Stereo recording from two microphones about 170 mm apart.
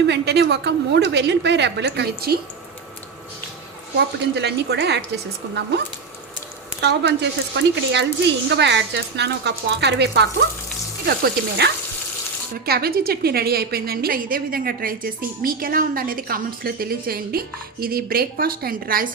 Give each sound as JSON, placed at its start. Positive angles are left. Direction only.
{"t": 0.1, "sound": "a woman's voice", "side_deg": -80}
{"t": 3.9, "sound": "a woman's voice", "side_deg": -85}
{"t": 6.8, "sound": "a woman's voice", "side_deg": -90}